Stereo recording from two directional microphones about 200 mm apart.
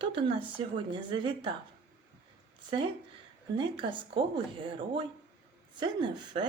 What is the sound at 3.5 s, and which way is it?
Speech, 25° right (ahead or behind).